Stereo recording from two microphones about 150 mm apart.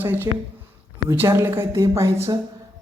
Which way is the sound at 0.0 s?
15° right (ahead or behind).